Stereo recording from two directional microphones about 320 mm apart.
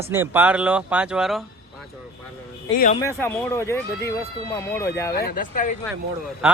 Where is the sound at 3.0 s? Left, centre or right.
Centre.